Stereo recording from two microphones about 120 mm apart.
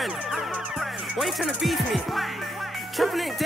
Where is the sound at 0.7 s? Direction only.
5° right (ahead or behind).